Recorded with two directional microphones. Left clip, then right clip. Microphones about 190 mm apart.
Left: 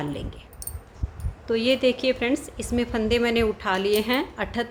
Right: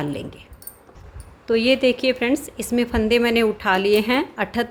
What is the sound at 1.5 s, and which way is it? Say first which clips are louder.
A woman's voice: right 4 dB; 25° right (ahead or behind).